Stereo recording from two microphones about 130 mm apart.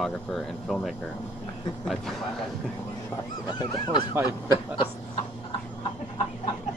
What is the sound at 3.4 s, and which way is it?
Speech, 35° left (ahead or behind).